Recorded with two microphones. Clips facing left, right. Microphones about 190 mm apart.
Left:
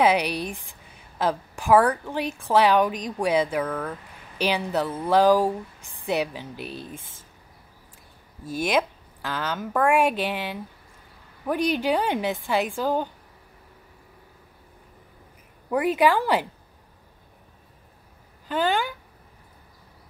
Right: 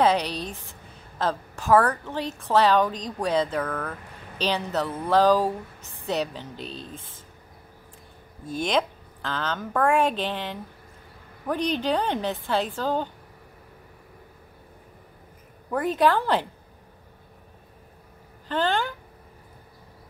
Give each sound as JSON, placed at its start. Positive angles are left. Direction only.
{"t": 0.0, "sound": "a woman's voice", "side_deg": 10}
{"t": 8.5, "sound": "a woman's voice", "side_deg": 5}
{"t": 15.7, "sound": "a woman's voice", "side_deg": 10}
{"t": 18.5, "sound": "a woman's voice", "side_deg": 10}